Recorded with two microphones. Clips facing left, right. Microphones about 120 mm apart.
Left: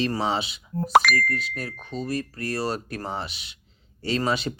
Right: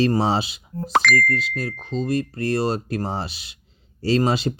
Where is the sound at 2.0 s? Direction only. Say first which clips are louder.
Right 6 dB; 25° right (ahead or behind).